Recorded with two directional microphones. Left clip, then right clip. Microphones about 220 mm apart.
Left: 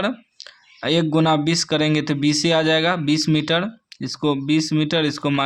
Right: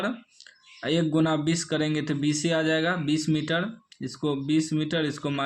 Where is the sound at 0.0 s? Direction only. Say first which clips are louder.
Left 6 dB; 35° left (ahead or behind).